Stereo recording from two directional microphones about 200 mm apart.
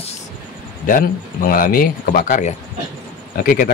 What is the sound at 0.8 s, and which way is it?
Speech, 45° left (ahead or behind).